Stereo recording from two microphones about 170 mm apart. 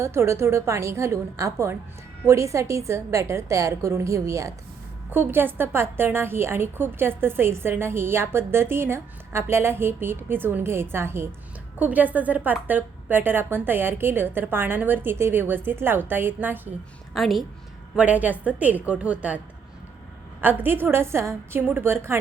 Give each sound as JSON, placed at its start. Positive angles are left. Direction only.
{"t": 0.0, "sound": "a woman's voice", "side_deg": -15}
{"t": 17.2, "sound": "a woman's voice", "side_deg": 0}
{"t": 20.4, "sound": "a woman's voice", "side_deg": -10}